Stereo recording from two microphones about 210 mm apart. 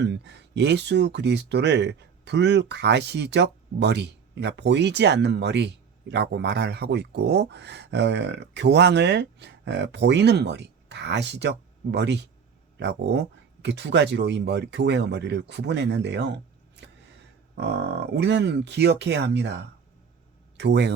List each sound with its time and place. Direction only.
0.0 s speech: 55° right (ahead or behind)
17.5 s speech: 55° right (ahead or behind)
20.6 s speech: 55° right (ahead or behind)